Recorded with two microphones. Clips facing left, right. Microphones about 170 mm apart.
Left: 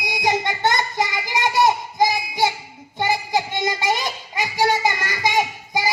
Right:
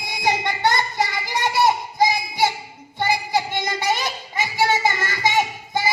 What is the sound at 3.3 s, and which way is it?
Child singing, 20° left (ahead or behind).